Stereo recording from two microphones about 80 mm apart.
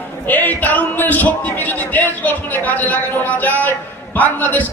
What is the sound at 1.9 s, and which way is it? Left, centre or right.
A man's voice, left.